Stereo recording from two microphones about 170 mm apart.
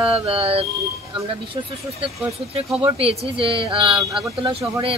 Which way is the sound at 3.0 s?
35° right (ahead or behind).